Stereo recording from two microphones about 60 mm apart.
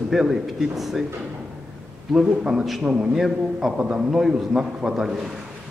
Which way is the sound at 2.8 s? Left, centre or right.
Centre.